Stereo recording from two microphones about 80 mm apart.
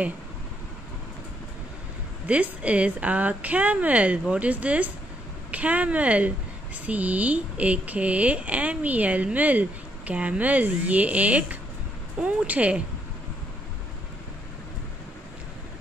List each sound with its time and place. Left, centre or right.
2.2 s a woman's voice: centre